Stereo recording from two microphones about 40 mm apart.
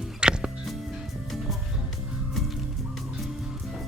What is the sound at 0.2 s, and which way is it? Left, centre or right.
Music, right.